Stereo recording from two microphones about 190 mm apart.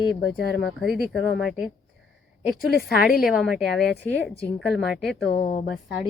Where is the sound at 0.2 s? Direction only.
60° left (ahead or behind).